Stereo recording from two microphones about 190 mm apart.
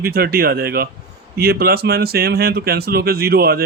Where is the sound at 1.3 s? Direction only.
55° right (ahead or behind).